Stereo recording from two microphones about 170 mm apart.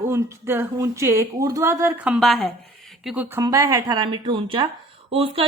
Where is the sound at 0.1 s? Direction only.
15° right (ahead or behind).